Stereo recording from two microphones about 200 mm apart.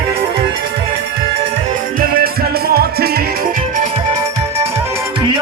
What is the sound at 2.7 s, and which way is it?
Music, 50° right (ahead or behind).